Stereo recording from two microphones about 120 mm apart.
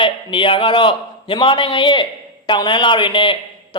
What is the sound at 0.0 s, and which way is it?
A man's voice, 45° left (ahead or behind).